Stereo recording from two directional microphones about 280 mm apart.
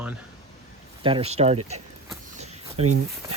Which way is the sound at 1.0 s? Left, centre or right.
Centre.